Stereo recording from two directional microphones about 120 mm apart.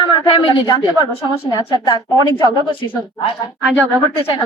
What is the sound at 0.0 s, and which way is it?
A woman's voice, 45° left (ahead or behind).